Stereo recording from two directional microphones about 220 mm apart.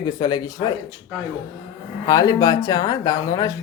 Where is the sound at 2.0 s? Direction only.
15° left (ahead or behind).